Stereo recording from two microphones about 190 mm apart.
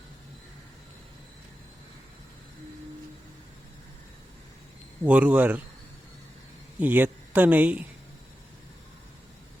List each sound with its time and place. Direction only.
5.0 s speech: 5° right (ahead or behind)
6.7 s speech: 10° right (ahead or behind)